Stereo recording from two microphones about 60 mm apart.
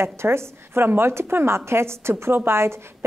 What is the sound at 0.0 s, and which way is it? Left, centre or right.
A woman's voice, right.